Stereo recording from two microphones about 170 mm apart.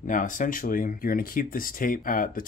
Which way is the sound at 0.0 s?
50° left (ahead or behind).